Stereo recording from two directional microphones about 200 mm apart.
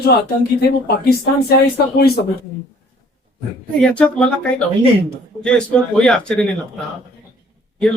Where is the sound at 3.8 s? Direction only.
5° left (ahead or behind).